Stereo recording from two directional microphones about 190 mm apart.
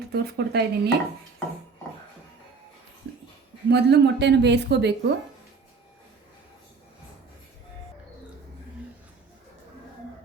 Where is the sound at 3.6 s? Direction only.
65° right (ahead or behind).